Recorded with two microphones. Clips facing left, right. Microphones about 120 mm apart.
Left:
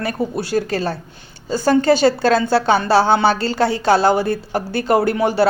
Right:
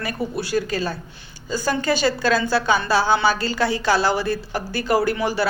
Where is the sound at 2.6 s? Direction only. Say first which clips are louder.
Left 4 dB; 50° left (ahead or behind).